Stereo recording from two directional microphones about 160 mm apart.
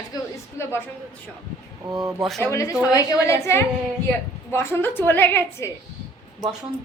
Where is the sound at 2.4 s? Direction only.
20° left (ahead or behind).